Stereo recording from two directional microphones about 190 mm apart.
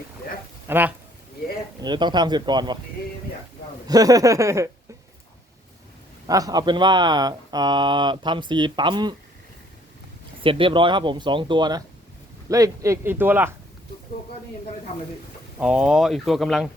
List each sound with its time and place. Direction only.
0.7 s speech: 10° right (ahead or behind)
1.8 s speech: 25° right (ahead or behind)
3.8 s speech: 20° right (ahead or behind)
6.2 s speech: 20° right (ahead or behind)
10.4 s speech: 25° right (ahead or behind); by 13.5 s 10° right (ahead or behind)
15.5 s speech: 5° right (ahead or behind)